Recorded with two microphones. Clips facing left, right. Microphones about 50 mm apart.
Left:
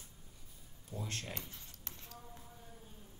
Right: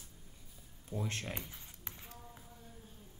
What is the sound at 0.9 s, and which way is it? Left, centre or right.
Speech, right.